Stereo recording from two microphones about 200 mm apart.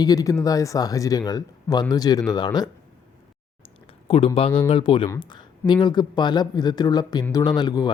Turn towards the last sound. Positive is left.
turn(degrees=20)  # may be behind; listen again after turning